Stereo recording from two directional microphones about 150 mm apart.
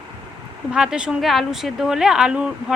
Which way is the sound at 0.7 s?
5° right (ahead or behind).